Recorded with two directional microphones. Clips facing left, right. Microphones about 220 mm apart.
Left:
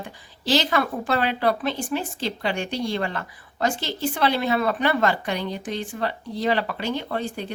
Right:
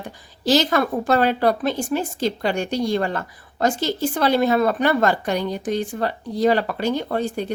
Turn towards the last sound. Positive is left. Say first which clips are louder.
# right 5 dB
turn(degrees=-40)  # may be behind; listen again after turning